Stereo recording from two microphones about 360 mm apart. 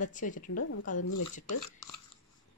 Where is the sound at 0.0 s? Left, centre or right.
Left.